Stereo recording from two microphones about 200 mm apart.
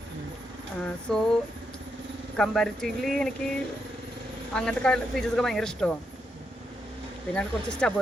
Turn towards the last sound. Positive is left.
turn(degrees=5)  # may be behind; listen again after turning